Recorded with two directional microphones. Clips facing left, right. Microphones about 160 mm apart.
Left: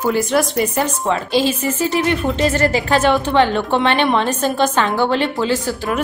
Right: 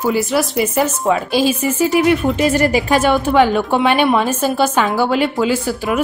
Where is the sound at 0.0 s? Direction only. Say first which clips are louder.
Even; 5° right (ahead or behind).